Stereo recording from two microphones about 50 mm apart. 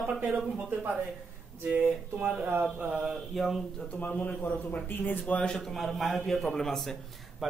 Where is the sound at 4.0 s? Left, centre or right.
Left.